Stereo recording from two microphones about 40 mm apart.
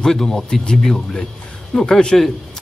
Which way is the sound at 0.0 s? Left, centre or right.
Centre.